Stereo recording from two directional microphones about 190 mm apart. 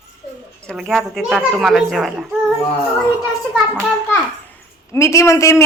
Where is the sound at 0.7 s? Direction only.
Centre (ahead or behind).